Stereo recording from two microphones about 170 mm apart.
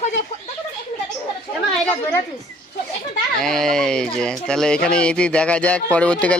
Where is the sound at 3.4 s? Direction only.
5° left (ahead or behind).